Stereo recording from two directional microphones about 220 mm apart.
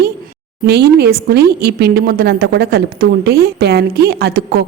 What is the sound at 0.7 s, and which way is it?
A woman's voice, 45° right (ahead or behind).